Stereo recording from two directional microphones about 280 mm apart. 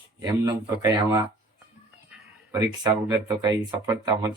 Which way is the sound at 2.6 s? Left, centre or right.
Centre.